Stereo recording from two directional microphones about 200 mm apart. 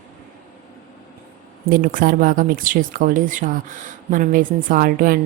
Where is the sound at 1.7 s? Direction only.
45° right (ahead or behind).